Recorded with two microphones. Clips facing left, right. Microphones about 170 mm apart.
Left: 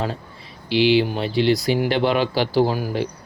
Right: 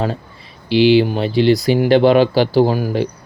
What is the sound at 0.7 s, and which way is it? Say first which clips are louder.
Speech: right 5 dB; 35° right (ahead or behind).